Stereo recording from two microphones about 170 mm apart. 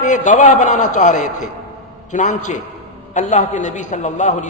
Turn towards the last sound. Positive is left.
turn(degrees=45)  # may be behind; listen again after turning